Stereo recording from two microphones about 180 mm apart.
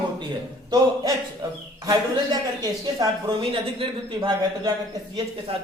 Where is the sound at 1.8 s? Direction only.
20° right (ahead or behind).